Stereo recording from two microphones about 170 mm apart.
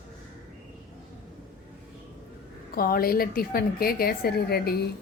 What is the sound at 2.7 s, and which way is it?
A woman's voice, 60° left (ahead or behind).